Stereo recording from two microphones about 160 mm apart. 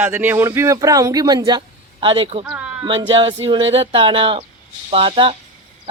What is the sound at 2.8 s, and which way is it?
Speech, 30° right (ahead or behind).